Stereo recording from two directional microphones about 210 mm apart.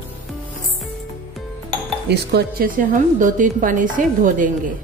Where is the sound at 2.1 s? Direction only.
50° right (ahead or behind).